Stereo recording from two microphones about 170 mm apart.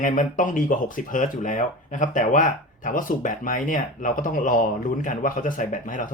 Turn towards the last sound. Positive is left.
turn(degrees=50)  # may be behind; listen again after turning